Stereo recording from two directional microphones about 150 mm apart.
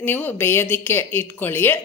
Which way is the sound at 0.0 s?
15° left (ahead or behind).